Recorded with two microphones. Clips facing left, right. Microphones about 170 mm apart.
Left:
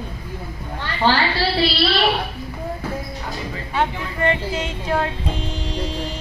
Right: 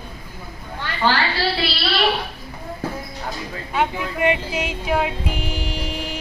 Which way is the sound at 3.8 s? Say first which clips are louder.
Right 1 dB; 10° right (ahead or behind).